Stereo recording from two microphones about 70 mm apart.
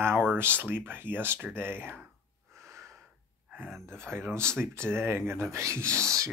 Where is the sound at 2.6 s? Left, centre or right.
Right.